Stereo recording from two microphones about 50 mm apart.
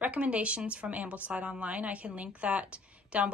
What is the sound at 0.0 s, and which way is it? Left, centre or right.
Speech, right.